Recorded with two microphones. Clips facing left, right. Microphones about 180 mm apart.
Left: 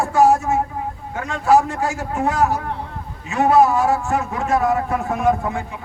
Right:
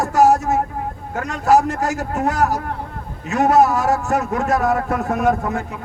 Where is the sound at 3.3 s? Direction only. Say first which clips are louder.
Even; 40° right (ahead or behind).